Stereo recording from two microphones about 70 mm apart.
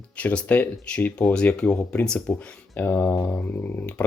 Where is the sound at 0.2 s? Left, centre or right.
Left.